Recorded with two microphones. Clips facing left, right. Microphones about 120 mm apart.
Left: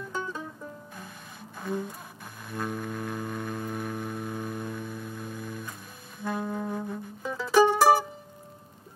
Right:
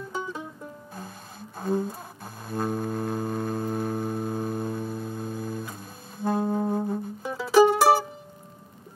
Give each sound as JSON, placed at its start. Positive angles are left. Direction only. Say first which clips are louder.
{"t": 0.2, "sound": "music", "louder": "right 1 dB", "side_deg": -15}
{"t": 1.6, "sound": "speech", "louder": "right 6 dB", "side_deg": -35}
{"t": 2.4, "sound": "music", "louder": "right 5 dB", "side_deg": -35}
{"t": 7.2, "sound": "mandolin", "louder": "right 3 dB", "side_deg": -10}